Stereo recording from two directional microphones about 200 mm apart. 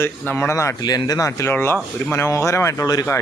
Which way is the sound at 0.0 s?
10° left (ahead or behind).